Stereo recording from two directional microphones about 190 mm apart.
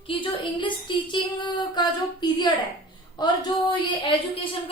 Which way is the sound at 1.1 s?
25° left (ahead or behind).